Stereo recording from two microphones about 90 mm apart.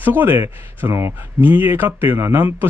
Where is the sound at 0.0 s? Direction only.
20° right (ahead or behind).